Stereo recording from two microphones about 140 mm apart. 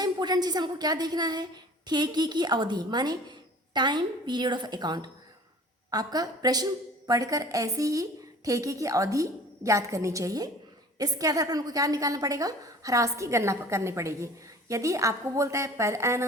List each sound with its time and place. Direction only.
0.0 s a woman's voice: 30° right (ahead or behind)